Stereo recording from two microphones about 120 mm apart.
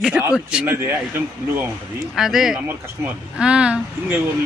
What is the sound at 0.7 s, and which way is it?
Speech, 20° right (ahead or behind).